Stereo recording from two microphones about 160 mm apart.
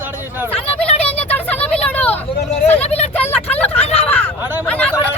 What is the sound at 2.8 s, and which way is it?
Speech, 40° left (ahead or behind).